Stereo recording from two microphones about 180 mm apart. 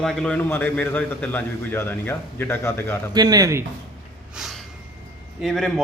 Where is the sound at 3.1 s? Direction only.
20° right (ahead or behind).